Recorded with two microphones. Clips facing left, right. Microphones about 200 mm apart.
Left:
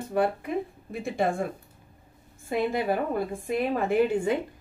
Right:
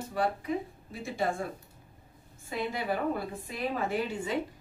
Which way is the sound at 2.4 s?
50° left (ahead or behind).